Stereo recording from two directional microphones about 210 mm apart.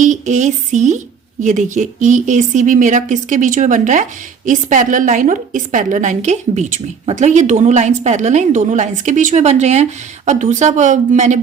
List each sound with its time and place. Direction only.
0.0 s a woman's voice: 35° right (ahead or behind)